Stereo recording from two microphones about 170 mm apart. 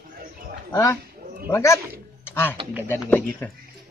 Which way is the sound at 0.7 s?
20° left (ahead or behind).